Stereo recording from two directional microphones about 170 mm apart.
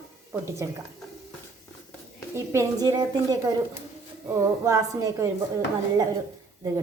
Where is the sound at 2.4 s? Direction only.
15° right (ahead or behind).